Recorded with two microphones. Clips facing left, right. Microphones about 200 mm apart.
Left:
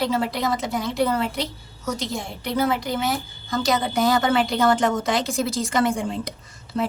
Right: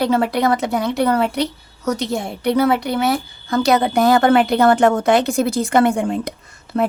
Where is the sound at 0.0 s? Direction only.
60° right (ahead or behind).